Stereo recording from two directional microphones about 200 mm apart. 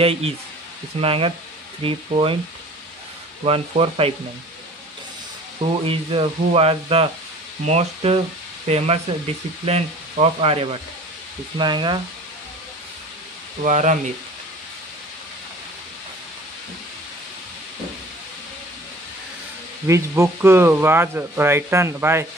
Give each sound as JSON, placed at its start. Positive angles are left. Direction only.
{"t": 0.0, "sound": "speech", "side_deg": -30}
{"t": 3.4, "sound": "speech", "side_deg": -30}
{"t": 5.9, "sound": "speech", "side_deg": -25}
{"t": 13.6, "sound": "speech", "side_deg": -35}
{"t": 19.9, "sound": "speech", "side_deg": -15}